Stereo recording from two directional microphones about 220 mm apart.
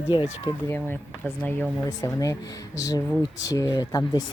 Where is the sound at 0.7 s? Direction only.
10° left (ahead or behind).